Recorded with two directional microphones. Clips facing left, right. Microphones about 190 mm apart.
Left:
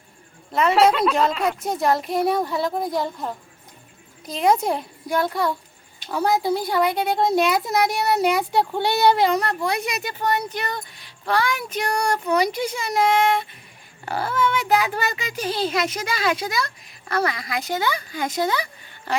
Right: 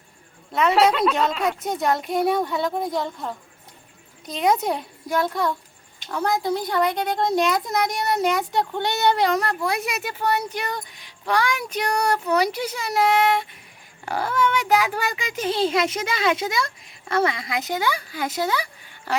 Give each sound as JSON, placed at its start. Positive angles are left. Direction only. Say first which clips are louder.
{"t": 0.5, "sound": "a woman's voice", "louder": "left 1 dB", "side_deg": 0}
{"t": 4.3, "sound": "a woman's voice", "louder": "left 2 dB", "side_deg": 0}